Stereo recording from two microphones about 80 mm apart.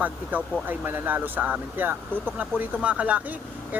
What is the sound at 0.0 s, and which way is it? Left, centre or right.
Speech, centre.